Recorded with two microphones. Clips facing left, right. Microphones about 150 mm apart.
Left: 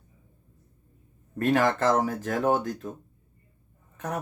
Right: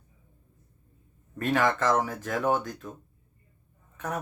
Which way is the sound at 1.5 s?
40° left (ahead or behind).